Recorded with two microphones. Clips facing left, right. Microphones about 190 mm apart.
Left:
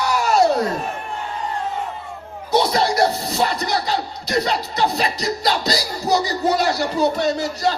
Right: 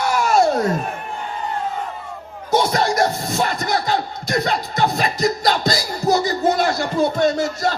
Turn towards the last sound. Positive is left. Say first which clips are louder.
# right 2 dB
turn(degrees=-50)  # may be behind; listen again after turning